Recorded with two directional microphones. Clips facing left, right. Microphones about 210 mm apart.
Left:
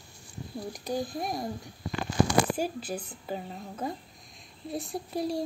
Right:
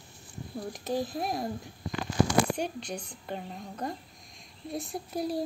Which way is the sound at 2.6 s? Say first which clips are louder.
Left 2 dB; 5° left (ahead or behind).